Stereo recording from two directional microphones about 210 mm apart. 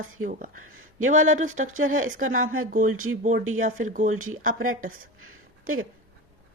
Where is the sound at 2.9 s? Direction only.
90° right.